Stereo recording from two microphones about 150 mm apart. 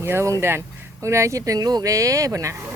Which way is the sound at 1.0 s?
20° right (ahead or behind).